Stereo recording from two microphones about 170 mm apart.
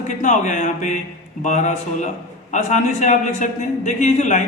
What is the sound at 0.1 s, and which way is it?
A man's voice, 45° left (ahead or behind).